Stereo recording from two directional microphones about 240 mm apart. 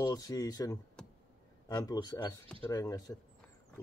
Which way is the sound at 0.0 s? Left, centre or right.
Centre.